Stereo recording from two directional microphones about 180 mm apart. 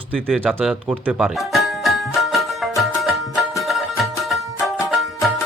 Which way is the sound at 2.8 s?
Centre (ahead or behind).